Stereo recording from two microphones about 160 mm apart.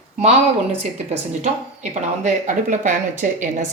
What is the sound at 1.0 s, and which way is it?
A woman's voice, 45° right (ahead or behind).